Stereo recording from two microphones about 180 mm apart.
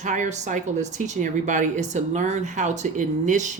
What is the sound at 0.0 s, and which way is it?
Speech, 45° right (ahead or behind).